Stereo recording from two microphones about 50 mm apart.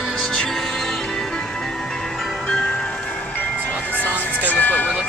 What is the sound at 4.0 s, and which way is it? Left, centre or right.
Music, left.